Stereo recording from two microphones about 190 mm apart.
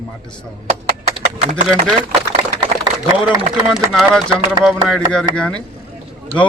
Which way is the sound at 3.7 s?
Centre (ahead or behind).